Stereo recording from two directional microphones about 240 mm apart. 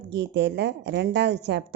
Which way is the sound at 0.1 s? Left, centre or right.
Right.